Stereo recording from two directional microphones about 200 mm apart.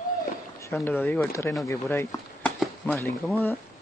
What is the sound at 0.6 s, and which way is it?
Speech, 10° left (ahead or behind).